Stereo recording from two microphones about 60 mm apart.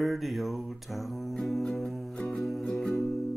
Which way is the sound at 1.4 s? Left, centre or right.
Centre.